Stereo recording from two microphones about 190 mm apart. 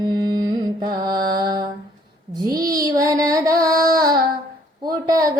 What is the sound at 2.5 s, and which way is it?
Child singing, 20° right (ahead or behind).